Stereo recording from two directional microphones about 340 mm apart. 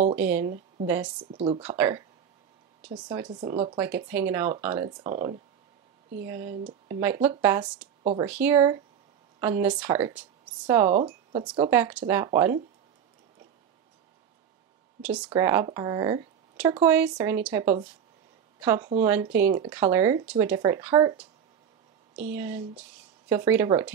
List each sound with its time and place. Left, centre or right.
0.1 s speech: centre
1.3 s speech: centre
6.2 s speech: centre
8.0 s speech: centre
8.3 s speech: centre
10.9 s speech: right
15.0 s speech: centre
22.3 s speech: centre